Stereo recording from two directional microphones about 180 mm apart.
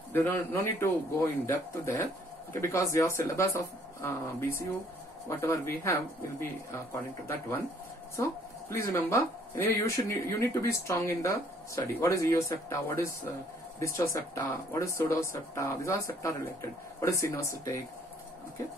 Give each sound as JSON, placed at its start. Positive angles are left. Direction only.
{"t": 0.1, "sound": "speech", "side_deg": 10}